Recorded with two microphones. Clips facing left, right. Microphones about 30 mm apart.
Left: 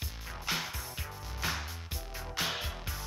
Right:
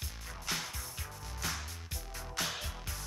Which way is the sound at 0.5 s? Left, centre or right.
Left.